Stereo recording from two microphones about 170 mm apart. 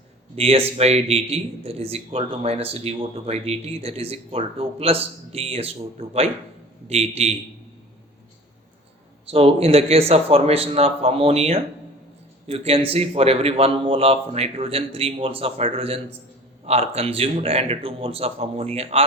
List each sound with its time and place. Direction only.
0.3 s a man's voice: 35° right (ahead or behind)
9.3 s a man's voice: 35° right (ahead or behind)